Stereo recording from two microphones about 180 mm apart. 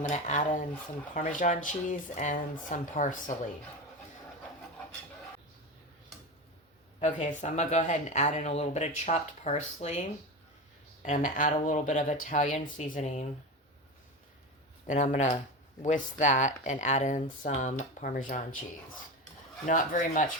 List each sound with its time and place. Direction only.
0.1 s speech: 40° left (ahead or behind)
7.0 s speech: 45° left (ahead or behind)
14.8 s speech: 40° left (ahead or behind)
19.6 s speech: 45° left (ahead or behind)